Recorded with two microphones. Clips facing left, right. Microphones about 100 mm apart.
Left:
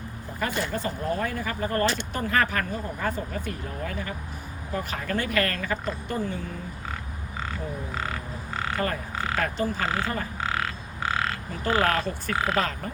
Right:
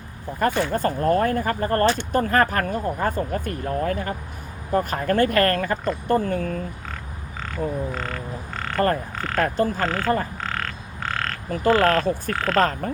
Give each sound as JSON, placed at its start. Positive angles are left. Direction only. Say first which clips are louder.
{"t": 0.3, "sound": "speech", "louder": "right 7 dB", "side_deg": -50}
{"t": 7.9, "sound": "croak", "louder": "right 2 dB", "side_deg": 5}
{"t": 9.1, "sound": "frog", "louder": "right 1 dB", "side_deg": 5}
{"t": 9.4, "sound": "speech", "louder": "right 8 dB", "side_deg": -50}
{"t": 9.8, "sound": "croak", "louder": "right 3 dB", "side_deg": 5}
{"t": 10.4, "sound": "frog", "louder": "even", "side_deg": 5}
{"t": 11.7, "sound": "speech", "louder": "right 6 dB", "side_deg": 10}
{"t": 12.5, "sound": "speech", "louder": "right 7 dB", "side_deg": -45}